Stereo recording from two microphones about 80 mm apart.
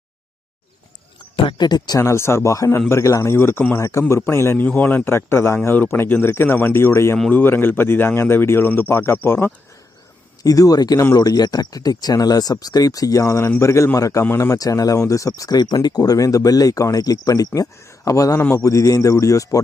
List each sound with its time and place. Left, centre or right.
1.4 s speech: left
2.0 s a man's voice: left
4.6 s speech: left
10.4 s a man's voice: left
14.3 s speech: left
14.5 s speech: left